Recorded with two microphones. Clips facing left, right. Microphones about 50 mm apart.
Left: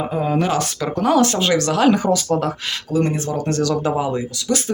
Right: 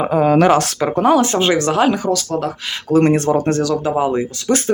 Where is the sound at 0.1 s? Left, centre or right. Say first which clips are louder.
Right 10 dB; right.